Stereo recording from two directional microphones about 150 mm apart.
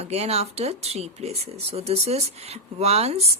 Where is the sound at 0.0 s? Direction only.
45° right (ahead or behind).